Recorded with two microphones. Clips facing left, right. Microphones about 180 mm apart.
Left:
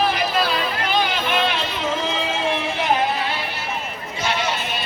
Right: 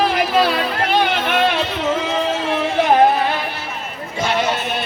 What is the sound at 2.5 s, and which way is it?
Music, 50° right (ahead or behind).